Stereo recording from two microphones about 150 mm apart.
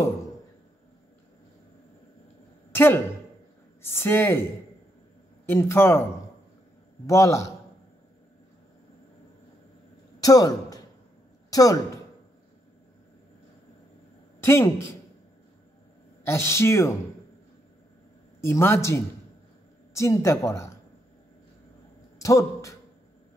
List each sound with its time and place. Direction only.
2.7 s a woman's voice: 15° left (ahead or behind)
5.5 s a woman's voice: 15° left (ahead or behind)
7.1 s speech: 20° left (ahead or behind)
10.2 s a man's voice: 25° left (ahead or behind)
14.4 s speech: 15° left (ahead or behind)
16.3 s a woman's voice: 15° left (ahead or behind)
18.4 s a woman's voice: 15° left (ahead or behind)
22.2 s a man's voice: 20° left (ahead or behind)